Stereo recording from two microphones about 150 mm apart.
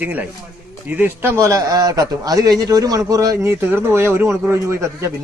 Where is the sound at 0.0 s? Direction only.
10° right (ahead or behind).